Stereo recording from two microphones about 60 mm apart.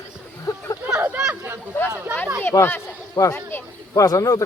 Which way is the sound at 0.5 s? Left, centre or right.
Left.